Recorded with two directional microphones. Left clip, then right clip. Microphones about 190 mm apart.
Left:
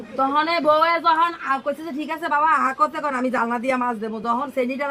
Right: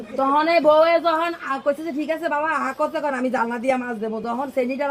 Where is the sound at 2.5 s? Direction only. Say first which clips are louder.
Left 3 dB; 10° left (ahead or behind).